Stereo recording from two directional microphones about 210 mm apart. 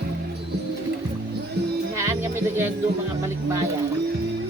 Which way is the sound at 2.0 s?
10° right (ahead or behind).